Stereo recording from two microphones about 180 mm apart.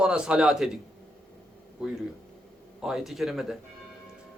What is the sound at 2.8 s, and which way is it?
Speech, centre (ahead or behind).